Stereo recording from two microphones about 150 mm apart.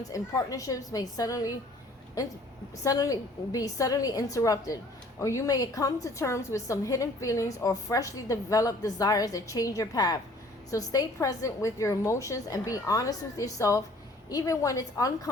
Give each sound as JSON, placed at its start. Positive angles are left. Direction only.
{"t": 0.1, "sound": "a woman's voice", "side_deg": 20}